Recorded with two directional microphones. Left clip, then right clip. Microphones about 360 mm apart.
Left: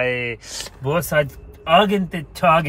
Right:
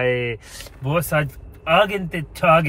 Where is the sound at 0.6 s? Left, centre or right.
Left.